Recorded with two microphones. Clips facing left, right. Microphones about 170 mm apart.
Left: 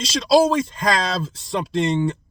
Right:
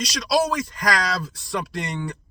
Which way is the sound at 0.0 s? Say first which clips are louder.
Left 6 dB; 25° left (ahead or behind).